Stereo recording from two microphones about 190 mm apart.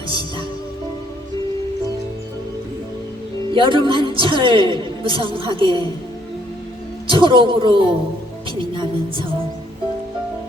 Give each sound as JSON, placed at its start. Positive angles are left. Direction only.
{"t": 3.5, "sound": "a man's voice", "side_deg": -25}
{"t": 7.1, "sound": "a man's voice", "side_deg": -25}